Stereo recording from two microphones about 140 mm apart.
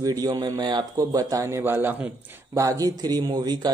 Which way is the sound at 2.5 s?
25° right (ahead or behind).